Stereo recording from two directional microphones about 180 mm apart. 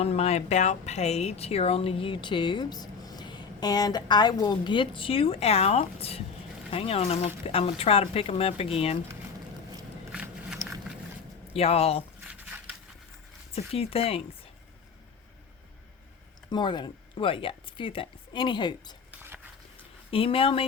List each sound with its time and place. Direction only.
0.0 s speech: 35° left (ahead or behind)
10.1 s biting: 5° right (ahead or behind)
11.5 s speech: 35° left (ahead or behind)
12.3 s a sound: 10° right (ahead or behind)
13.5 s speech: 35° left (ahead or behind)
16.5 s speech: 25° left (ahead or behind)
19.1 s a sound: 10° right (ahead or behind)
20.1 s speech: 30° left (ahead or behind)